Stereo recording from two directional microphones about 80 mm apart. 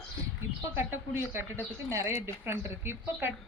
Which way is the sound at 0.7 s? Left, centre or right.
Right.